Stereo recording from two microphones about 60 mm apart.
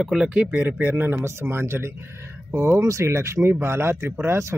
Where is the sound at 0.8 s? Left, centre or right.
Right.